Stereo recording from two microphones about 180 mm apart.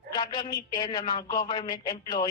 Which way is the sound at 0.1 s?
25° left (ahead or behind).